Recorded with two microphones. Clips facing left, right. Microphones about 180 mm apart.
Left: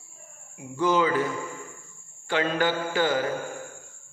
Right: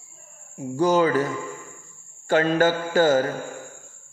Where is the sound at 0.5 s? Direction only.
40° right (ahead or behind).